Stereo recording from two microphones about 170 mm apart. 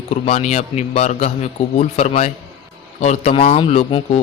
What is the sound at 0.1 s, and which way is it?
A man's voice, 40° left (ahead or behind).